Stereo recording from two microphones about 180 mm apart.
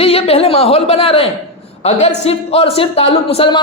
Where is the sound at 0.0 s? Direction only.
35° left (ahead or behind).